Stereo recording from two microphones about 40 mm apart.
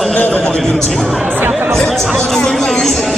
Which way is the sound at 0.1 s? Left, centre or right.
Left.